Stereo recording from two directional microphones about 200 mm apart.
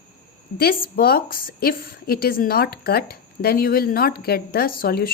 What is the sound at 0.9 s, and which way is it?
A woman's voice, 50° left (ahead or behind).